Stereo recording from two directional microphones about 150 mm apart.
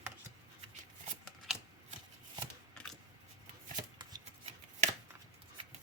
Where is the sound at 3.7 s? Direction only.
25° right (ahead or behind).